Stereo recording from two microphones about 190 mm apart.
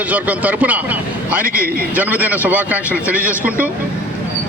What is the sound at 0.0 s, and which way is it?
A man's voice, 10° right (ahead or behind).